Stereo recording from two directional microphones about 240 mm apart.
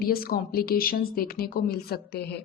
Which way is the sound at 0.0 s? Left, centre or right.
Left.